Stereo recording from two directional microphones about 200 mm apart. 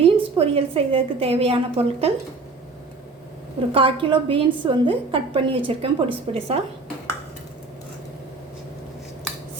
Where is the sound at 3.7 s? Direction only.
25° right (ahead or behind).